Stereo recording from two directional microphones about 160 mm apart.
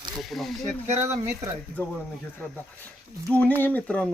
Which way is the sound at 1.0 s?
15° right (ahead or behind).